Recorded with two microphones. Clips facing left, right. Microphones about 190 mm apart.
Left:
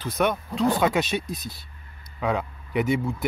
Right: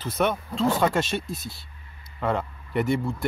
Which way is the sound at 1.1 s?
15° left (ahead or behind).